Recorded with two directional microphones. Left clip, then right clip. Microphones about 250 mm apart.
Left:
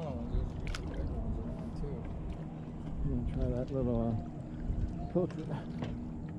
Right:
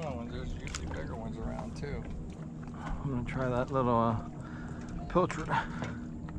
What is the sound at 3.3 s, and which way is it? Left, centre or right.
Speech, centre.